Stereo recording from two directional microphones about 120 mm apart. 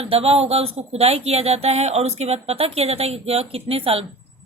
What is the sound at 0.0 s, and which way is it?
Speech, 55° right (ahead or behind).